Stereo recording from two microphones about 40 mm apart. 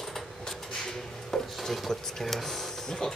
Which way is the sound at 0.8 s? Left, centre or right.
Centre.